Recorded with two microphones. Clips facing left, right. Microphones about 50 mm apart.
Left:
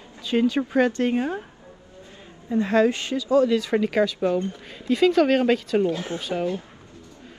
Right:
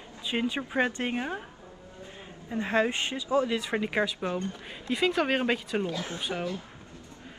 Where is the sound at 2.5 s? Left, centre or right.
Right.